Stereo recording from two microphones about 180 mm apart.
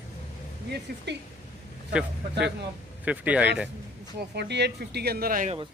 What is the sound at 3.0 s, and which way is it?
Speech, 10° right (ahead or behind).